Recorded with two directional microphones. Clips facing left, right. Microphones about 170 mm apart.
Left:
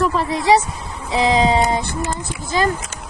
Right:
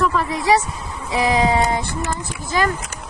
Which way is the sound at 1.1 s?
20° left (ahead or behind).